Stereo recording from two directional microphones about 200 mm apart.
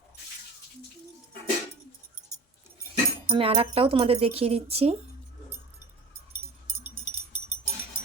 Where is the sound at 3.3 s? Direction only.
25° right (ahead or behind).